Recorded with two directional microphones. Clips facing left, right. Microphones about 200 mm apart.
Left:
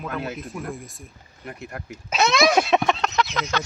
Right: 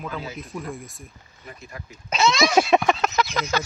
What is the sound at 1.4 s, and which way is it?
Speech, 65° left (ahead or behind).